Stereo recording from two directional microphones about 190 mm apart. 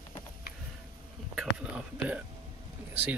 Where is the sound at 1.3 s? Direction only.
5° right (ahead or behind).